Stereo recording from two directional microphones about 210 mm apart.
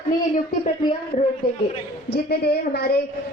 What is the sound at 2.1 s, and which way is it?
Speech, 50° left (ahead or behind).